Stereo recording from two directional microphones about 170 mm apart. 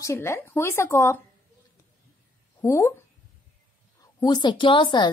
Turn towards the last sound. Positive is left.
turn(degrees=30)  # may be behind; listen again after turning